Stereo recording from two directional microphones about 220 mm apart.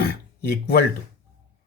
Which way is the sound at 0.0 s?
45° left (ahead or behind).